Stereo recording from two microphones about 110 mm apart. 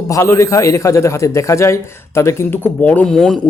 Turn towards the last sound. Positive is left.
turn(degrees=5)  # may be behind; listen again after turning